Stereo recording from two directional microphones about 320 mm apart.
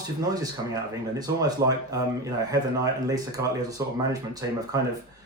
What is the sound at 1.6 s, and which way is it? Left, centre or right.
Speech, right.